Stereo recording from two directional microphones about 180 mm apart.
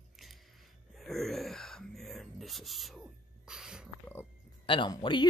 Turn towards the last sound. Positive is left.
turn(degrees=25)  # may be behind; listen again after turning